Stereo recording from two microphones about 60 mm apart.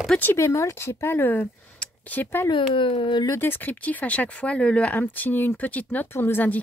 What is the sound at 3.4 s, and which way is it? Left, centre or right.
Speech, left.